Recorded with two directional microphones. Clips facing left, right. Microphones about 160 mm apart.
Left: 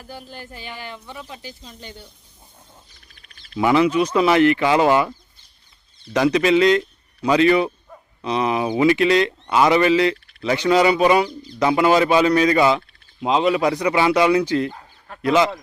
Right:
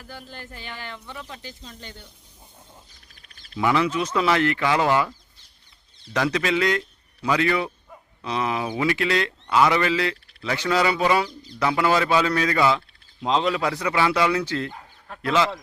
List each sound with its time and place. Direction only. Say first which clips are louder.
0.0 s speech: left 3 dB; 15° left (ahead or behind)
3.6 s a man's voice: left 5 dB; 20° left (ahead or behind)
6.1 s a man's voice: left 7 dB; 20° left (ahead or behind)